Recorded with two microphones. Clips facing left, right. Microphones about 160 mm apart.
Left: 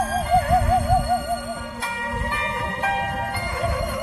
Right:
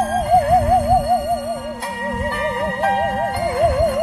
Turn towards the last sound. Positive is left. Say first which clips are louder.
# right 10 dB
turn(degrees=-60)  # may be behind; listen again after turning